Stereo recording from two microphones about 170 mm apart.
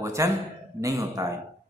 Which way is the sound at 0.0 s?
15° right (ahead or behind).